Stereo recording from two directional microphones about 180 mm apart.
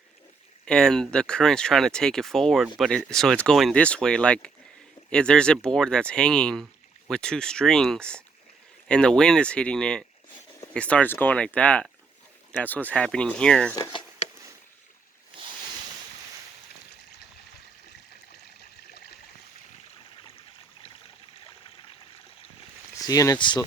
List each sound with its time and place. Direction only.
0.6 s speech: 5° left (ahead or behind)
23.0 s speech: 20° left (ahead or behind)